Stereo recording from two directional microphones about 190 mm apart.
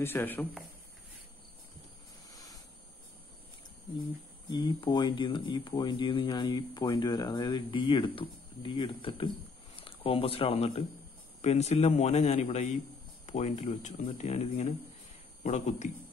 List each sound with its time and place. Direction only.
0.0 s speech: 10° left (ahead or behind)
2.3 s a sound: 20° left (ahead or behind)
4.5 s a man's voice: 25° left (ahead or behind)